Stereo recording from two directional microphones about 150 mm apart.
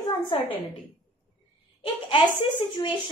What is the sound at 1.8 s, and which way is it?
Speech, 35° left (ahead or behind).